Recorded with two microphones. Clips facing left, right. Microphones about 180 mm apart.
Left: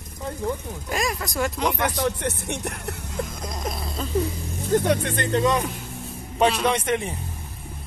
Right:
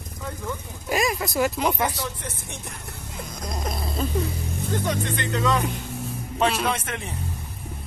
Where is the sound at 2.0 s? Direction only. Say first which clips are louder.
Left 8 dB; 70° left (ahead or behind).